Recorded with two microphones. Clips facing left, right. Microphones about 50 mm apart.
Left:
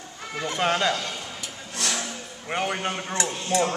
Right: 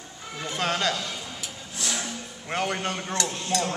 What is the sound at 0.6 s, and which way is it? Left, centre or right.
Speech, left.